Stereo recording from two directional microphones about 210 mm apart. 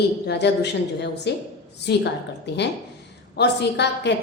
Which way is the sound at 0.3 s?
55° left (ahead or behind).